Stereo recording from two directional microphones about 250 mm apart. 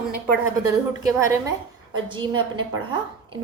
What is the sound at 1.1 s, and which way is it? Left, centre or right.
A woman's voice, centre.